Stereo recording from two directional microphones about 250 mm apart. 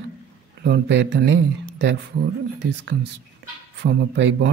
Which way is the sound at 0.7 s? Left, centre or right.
Right.